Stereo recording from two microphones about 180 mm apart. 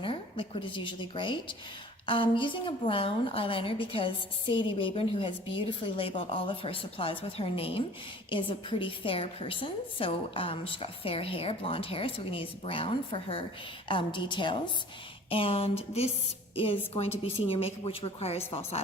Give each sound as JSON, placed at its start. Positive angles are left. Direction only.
{"t": 0.0, "sound": "a woman's voice", "side_deg": 30}